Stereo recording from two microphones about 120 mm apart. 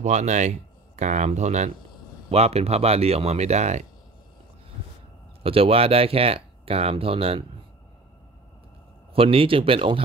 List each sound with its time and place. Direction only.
0.0 s speech: 75° right (ahead or behind)
2.2 s speech: 60° right (ahead or behind)
5.4 s speech: 50° right (ahead or behind)
9.1 s speech: 50° right (ahead or behind)